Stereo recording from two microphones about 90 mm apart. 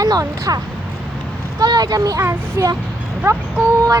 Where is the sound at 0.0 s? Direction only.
40° right (ahead or behind).